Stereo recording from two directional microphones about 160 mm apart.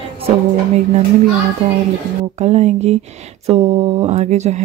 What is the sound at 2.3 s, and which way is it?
Speech, 45° right (ahead or behind).